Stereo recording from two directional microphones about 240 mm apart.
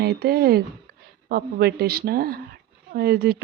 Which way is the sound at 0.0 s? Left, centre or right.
Right.